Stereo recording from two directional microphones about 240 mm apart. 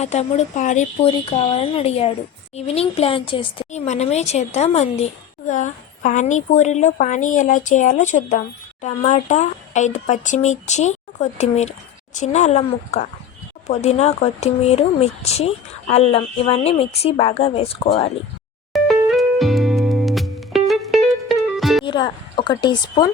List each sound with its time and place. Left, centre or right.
0.0 s a woman's voice: left
18.7 s music: centre
21.8 s a woman's voice: centre